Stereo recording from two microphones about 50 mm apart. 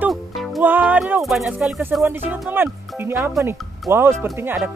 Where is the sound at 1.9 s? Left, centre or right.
Right.